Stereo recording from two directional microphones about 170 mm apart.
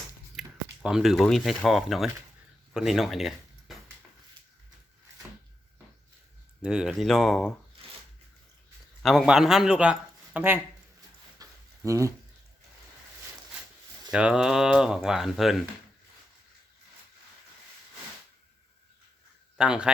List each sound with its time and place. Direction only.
0.3 s speech: centre (ahead or behind)
6.6 s speech: 5° right (ahead or behind)
9.0 s speech: 5° right (ahead or behind)
11.4 s a sound: 20° right (ahead or behind)
11.8 s speech: 20° right (ahead or behind)
14.1 s speech: 5° right (ahead or behind)
19.5 s a man's voice: 5° right (ahead or behind)